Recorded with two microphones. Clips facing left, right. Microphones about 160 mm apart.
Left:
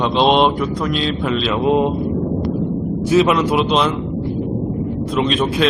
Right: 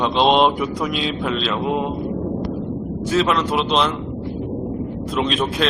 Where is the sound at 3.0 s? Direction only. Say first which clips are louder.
Left 5 dB; 10° left (ahead or behind).